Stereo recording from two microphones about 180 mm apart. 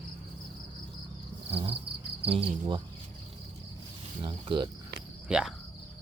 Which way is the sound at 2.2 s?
30° right (ahead or behind).